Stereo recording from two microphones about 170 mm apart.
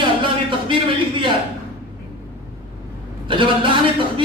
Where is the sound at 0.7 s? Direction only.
30° right (ahead or behind).